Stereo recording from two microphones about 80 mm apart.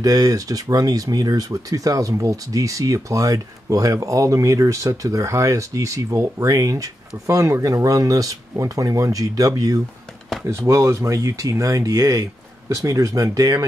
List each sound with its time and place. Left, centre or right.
0.0 s speech: right